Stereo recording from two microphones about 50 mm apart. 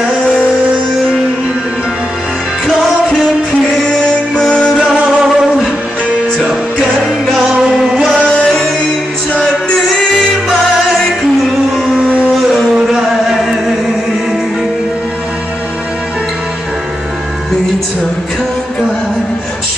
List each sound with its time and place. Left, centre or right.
3.7 s music: centre
4.8 s music: centre
7.9 s music: centre
8.3 s music: centre
11.7 s music: centre
13.4 s chant: centre